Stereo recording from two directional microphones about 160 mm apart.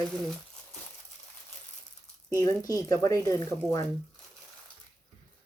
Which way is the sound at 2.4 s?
20° left (ahead or behind).